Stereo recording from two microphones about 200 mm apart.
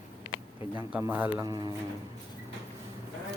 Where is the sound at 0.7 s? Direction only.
10° right (ahead or behind).